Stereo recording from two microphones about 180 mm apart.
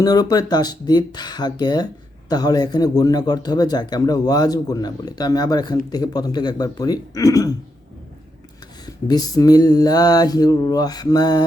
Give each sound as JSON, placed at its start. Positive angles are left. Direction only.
{"t": 0.0, "sound": "speech", "side_deg": 20}
{"t": 9.0, "sound": "speech", "side_deg": 20}